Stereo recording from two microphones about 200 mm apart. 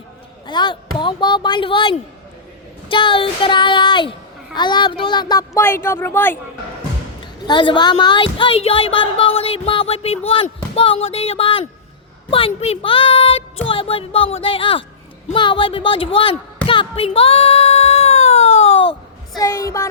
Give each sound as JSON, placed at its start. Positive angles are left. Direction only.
{"t": 0.4, "sound": "a woman's voice", "side_deg": 25}
{"t": 7.4, "sound": "a woman's voice", "side_deg": 25}
{"t": 16.6, "sound": "music", "side_deg": 25}
{"t": 19.4, "sound": "a woman's voice", "side_deg": 15}